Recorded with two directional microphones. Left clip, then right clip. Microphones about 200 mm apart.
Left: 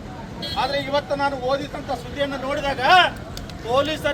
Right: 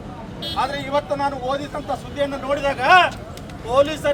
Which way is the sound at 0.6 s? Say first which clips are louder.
Even; 5° right (ahead or behind).